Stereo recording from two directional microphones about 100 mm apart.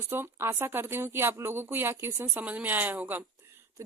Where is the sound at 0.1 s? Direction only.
25° right (ahead or behind).